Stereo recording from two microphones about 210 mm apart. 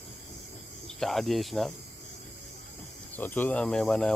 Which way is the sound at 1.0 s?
Centre (ahead or behind).